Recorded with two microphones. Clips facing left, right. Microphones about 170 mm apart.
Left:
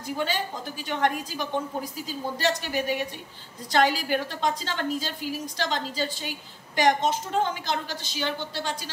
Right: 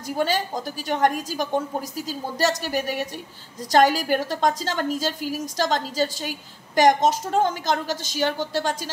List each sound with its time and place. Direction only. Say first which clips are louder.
0.0 s a woman's voice: right 5 dB; 40° right (ahead or behind)